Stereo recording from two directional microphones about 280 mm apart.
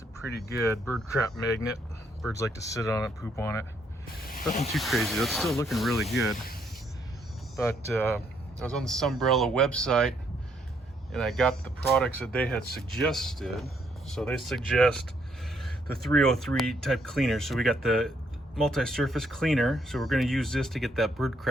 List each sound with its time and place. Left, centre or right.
0.6 s speech: centre
2.3 s speech: centre
4.7 s speech: centre
7.5 s speech: centre